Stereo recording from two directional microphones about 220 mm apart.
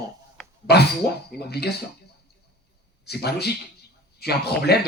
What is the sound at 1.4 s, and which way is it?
Speech, 45° left (ahead or behind).